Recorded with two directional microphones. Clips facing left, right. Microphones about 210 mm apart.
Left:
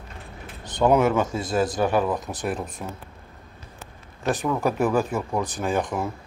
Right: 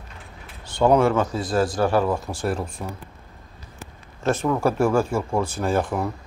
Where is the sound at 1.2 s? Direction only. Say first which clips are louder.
Right 1 dB; 20° left (ahead or behind).